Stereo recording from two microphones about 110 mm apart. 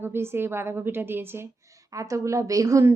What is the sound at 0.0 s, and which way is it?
A woman's voice, 20° right (ahead or behind).